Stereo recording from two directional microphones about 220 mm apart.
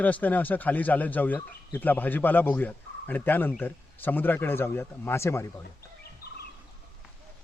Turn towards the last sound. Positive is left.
turn(degrees=45)  # may be behind; listen again after turning